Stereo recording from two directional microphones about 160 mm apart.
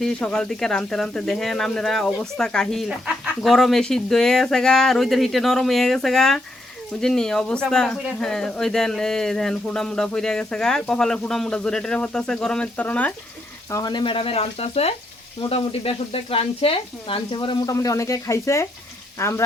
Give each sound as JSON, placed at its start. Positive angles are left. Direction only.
{"t": 0.0, "sound": "speech", "side_deg": 5}
{"t": 13.7, "sound": "speech", "side_deg": 25}
{"t": 17.7, "sound": "speech", "side_deg": 20}